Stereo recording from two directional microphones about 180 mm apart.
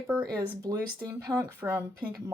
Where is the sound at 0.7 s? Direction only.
20° right (ahead or behind).